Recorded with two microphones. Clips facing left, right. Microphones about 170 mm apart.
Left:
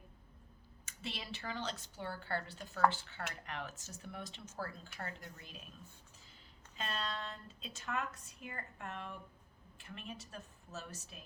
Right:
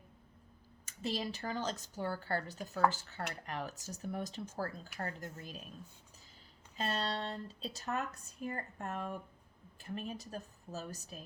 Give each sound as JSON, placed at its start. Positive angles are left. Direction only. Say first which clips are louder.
{"t": 0.9, "sound": "speech", "louder": "right 8 dB", "side_deg": -40}
{"t": 6.7, "sound": "speech", "louder": "right 5 dB", "side_deg": -35}